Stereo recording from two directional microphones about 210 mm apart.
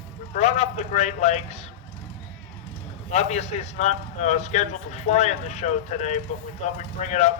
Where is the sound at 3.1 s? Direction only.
30° left (ahead or behind).